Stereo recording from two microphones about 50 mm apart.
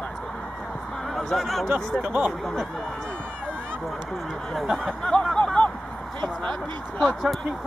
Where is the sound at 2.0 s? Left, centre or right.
Right.